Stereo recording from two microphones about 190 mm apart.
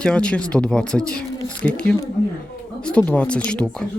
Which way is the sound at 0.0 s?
5° left (ahead or behind).